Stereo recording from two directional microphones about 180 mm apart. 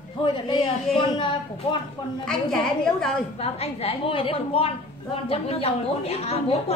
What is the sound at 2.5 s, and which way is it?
Speech, 5° left (ahead or behind).